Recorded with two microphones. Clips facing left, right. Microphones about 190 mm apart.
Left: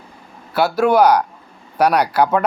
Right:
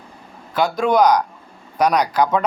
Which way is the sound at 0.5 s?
10° left (ahead or behind).